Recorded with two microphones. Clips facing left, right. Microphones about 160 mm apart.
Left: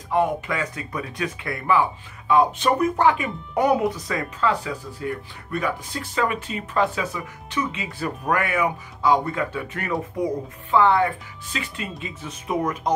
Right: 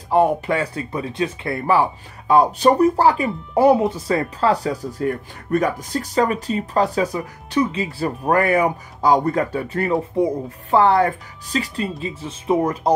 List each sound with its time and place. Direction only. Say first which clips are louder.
0.1 s speech: right 5 dB; 30° right (ahead or behind)